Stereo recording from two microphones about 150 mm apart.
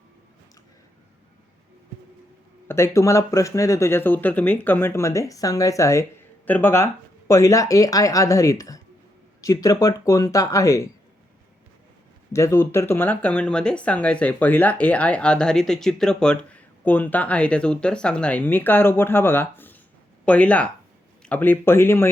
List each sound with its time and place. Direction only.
2.6 s speech: 15° left (ahead or behind)
12.3 s speech: 20° left (ahead or behind)